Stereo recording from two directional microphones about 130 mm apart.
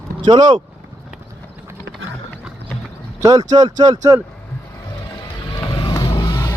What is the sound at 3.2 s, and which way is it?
Speech, 30° right (ahead or behind).